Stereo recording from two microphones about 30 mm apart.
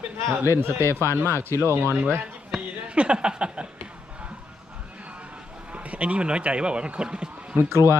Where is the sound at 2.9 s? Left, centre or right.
Right.